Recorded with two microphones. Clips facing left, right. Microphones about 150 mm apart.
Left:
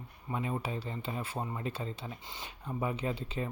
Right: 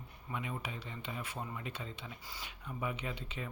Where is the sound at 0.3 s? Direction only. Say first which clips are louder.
Left 6 dB; 35° left (ahead or behind).